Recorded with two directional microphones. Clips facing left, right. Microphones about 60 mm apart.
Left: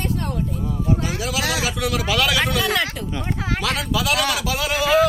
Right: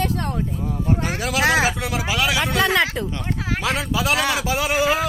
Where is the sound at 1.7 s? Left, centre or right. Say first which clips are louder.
Left 2 dB; right.